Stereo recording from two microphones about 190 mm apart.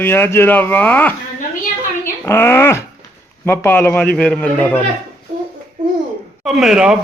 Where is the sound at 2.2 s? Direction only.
10° left (ahead or behind).